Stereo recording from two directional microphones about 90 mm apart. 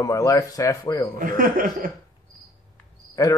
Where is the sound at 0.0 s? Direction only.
40° left (ahead or behind).